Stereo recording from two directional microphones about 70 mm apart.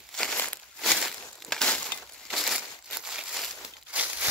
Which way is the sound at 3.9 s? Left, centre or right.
Centre.